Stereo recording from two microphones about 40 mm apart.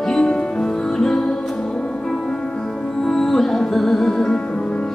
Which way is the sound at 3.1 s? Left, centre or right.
Centre.